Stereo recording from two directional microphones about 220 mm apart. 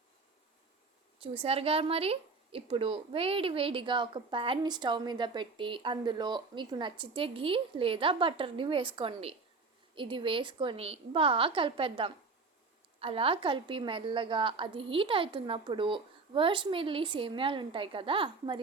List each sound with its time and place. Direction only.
1.2 s speech: 25° right (ahead or behind)